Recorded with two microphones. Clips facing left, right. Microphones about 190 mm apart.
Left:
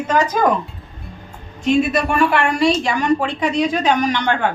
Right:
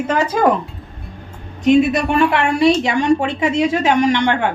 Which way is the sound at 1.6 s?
20° right (ahead or behind).